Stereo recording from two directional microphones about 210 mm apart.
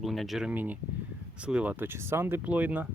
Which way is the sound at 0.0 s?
Centre (ahead or behind).